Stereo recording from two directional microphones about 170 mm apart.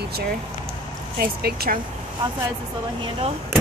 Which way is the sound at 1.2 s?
65° right (ahead or behind).